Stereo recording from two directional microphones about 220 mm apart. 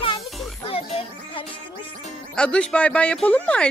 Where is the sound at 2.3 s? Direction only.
5° left (ahead or behind).